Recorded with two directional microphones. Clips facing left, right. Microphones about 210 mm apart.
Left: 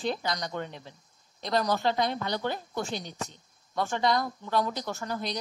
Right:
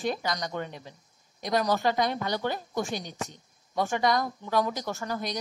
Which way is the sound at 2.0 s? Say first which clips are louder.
Right 1 dB; 45° right (ahead or behind).